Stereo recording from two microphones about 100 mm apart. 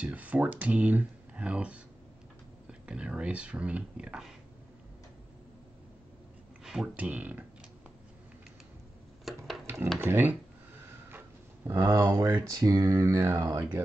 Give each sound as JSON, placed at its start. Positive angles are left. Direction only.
{"t": 0.0, "sound": "speech", "side_deg": -15}
{"t": 2.9, "sound": "speech", "side_deg": -10}
{"t": 6.6, "sound": "speech", "side_deg": -5}
{"t": 9.3, "sound": "a sound", "side_deg": -5}
{"t": 9.9, "sound": "speech", "side_deg": -20}
{"t": 11.1, "sound": "a sound", "side_deg": -25}
{"t": 12.4, "sound": "speech", "side_deg": -35}